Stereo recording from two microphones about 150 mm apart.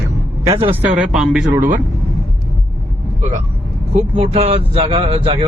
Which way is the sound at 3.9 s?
45° right (ahead or behind).